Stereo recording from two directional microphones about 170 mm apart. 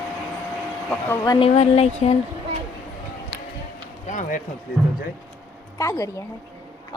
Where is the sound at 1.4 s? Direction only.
35° left (ahead or behind).